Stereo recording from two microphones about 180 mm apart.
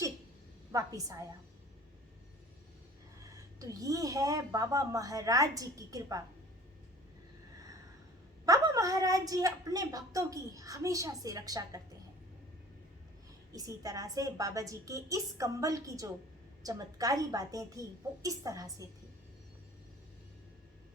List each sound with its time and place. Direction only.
0.7 s speech: 20° right (ahead or behind)
3.6 s speech: 20° right (ahead or behind)
8.4 s speech: 20° right (ahead or behind)
13.5 s speech: 20° right (ahead or behind)